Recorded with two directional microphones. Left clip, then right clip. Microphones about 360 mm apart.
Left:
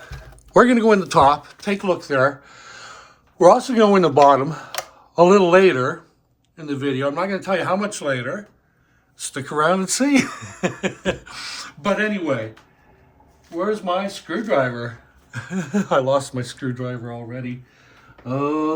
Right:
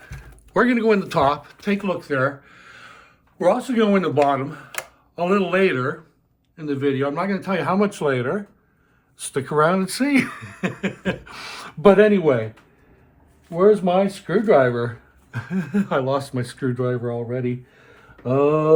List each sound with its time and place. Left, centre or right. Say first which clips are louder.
0.5 s speech: left 4 dB; centre
13.6 s speech: right 6 dB; centre